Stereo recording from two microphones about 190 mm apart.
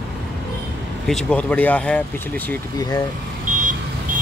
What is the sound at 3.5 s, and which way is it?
Vehicle, 45° right (ahead or behind).